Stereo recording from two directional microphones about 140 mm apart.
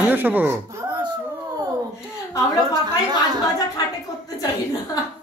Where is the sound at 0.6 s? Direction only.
25° right (ahead or behind).